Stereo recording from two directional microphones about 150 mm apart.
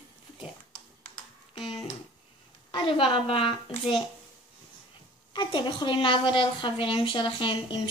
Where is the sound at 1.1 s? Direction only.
35° left (ahead or behind).